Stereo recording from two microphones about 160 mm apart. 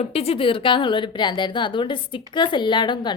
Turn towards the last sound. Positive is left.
turn(degrees=30)  # may be behind; listen again after turning